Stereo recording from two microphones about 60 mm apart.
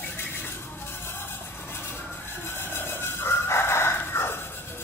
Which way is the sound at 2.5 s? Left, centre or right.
Left.